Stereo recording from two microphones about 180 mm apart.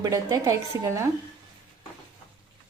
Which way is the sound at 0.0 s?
20° right (ahead or behind).